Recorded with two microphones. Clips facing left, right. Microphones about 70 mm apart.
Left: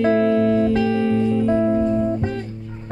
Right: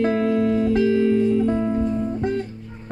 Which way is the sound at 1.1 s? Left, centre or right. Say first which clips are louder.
Right 1 dB; left.